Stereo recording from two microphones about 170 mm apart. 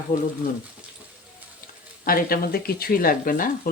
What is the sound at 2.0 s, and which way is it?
Speech, 60° left (ahead or behind).